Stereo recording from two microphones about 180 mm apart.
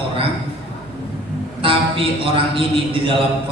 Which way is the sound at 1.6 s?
30° right (ahead or behind).